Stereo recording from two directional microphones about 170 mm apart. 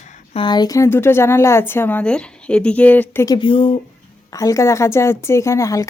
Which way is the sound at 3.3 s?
30° left (ahead or behind).